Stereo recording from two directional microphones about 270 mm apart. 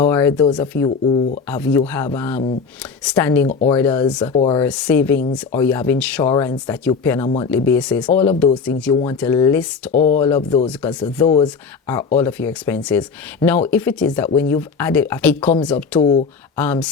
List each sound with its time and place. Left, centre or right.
0.1 s speech: centre
0.9 s speech: left
1.5 s speech: centre
3.5 s speech: left
3.8 s speech: centre
4.6 s speech: centre
9.9 s speech: left
10.2 s speech: centre
16.0 s speech: left
16.6 s speech: centre